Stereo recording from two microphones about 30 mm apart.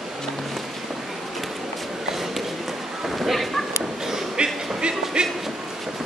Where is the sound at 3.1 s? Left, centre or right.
Centre.